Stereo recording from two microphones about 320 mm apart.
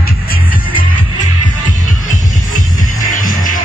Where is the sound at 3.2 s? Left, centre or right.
Left.